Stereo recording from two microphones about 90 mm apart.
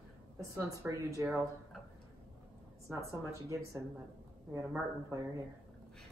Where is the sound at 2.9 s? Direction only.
30° right (ahead or behind).